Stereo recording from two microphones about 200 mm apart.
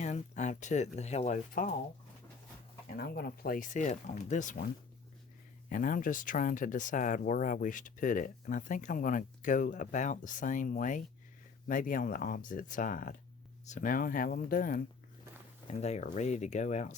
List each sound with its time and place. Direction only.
0.0 s speech: 35° left (ahead or behind)
2.9 s speech: 50° left (ahead or behind)
5.6 s speech: 45° left (ahead or behind)
15.6 s speech: 35° left (ahead or behind)